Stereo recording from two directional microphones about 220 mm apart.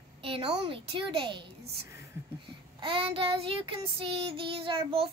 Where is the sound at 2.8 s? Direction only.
25° right (ahead or behind).